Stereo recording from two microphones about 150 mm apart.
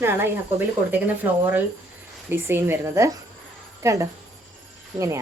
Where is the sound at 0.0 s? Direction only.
15° right (ahead or behind).